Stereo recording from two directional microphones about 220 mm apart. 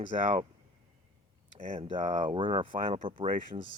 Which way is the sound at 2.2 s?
20° right (ahead or behind).